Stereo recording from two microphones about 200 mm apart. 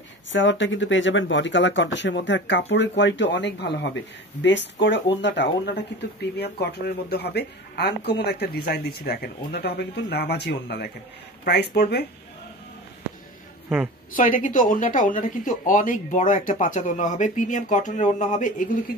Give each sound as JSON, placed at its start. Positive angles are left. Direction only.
{"t": 0.3, "sound": "speech", "side_deg": 65}
{"t": 13.7, "sound": "a woman's voice", "side_deg": -5}
{"t": 14.1, "sound": "speech", "side_deg": 40}